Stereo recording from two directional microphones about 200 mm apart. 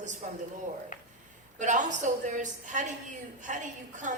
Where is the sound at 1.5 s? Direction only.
40° right (ahead or behind).